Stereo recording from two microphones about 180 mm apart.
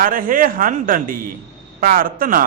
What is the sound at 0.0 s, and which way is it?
A man's voice, 50° right (ahead or behind).